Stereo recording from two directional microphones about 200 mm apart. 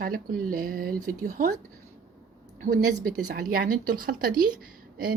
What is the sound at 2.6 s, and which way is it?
Speech, 45° right (ahead or behind).